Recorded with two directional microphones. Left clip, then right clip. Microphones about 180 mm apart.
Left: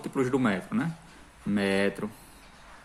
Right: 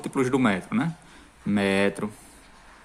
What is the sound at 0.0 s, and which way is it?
Speech, 35° right (ahead or behind).